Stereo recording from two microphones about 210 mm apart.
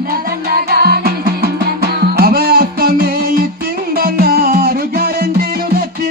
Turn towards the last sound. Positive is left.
turn(degrees=-45)  # may be behind; listen again after turning